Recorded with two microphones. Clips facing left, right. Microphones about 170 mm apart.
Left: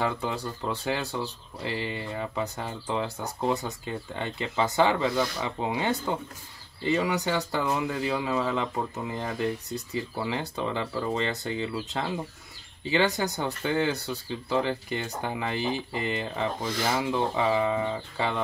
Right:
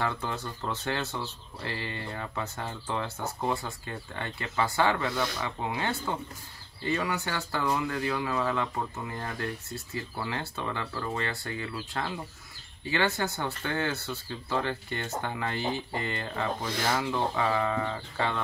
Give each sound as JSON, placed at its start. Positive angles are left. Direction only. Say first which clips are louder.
{"t": 0.0, "sound": "speech", "louder": "left 3 dB", "side_deg": 15}